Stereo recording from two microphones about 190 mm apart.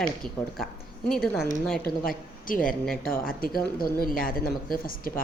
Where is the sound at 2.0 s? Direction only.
45° left (ahead or behind).